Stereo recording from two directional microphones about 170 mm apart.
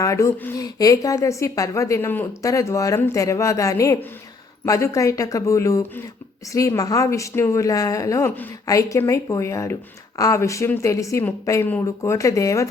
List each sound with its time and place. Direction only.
0.0 s a woman's voice: 15° left (ahead or behind)